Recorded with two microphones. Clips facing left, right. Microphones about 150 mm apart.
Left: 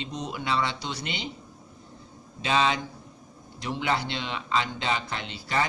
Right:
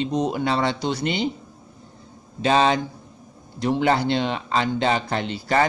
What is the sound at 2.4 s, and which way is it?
Speech, 45° right (ahead or behind).